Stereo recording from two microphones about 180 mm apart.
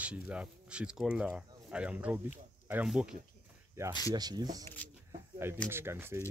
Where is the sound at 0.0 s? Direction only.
5° right (ahead or behind).